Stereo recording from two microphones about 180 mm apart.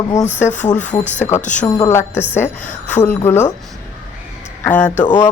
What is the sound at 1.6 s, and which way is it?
Speech, 15° left (ahead or behind).